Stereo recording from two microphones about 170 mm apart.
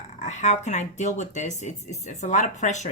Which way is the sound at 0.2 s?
45° left (ahead or behind).